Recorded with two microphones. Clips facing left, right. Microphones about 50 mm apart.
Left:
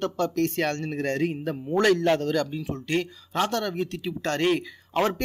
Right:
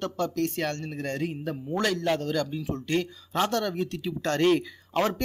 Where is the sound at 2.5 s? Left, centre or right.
Left.